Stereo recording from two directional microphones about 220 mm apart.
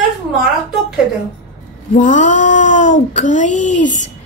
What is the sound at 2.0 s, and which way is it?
A woman's voice, 35° left (ahead or behind).